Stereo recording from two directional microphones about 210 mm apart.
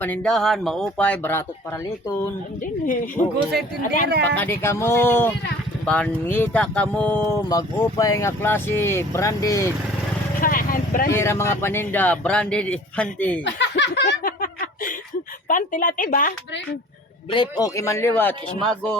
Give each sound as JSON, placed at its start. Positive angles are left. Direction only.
{"t": 0.0, "sound": "speech", "side_deg": 5}
{"t": 3.8, "sound": "speech", "side_deg": 40}
{"t": 4.4, "sound": "speech", "side_deg": 10}
{"t": 10.4, "sound": "vehicle", "side_deg": 40}
{"t": 11.1, "sound": "speech", "side_deg": 10}
{"t": 13.4, "sound": "a sound", "side_deg": 55}
{"t": 15.4, "sound": "speech", "side_deg": 40}
{"t": 17.3, "sound": "speech", "side_deg": 20}